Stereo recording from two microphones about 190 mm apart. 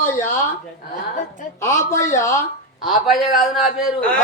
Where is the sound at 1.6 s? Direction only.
15° left (ahead or behind).